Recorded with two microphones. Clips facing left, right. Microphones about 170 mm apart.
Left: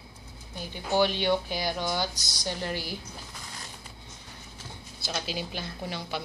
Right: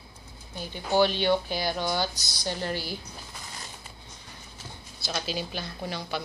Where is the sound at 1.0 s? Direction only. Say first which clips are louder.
Right 2 dB; 15° left (ahead or behind).